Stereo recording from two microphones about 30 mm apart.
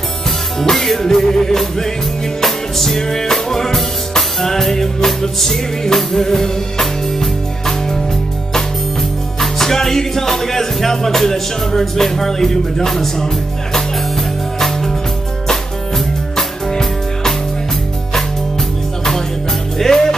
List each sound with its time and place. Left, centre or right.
0.6 s music: centre
9.4 s music: centre
16.3 s music: centre
19.8 s music: centre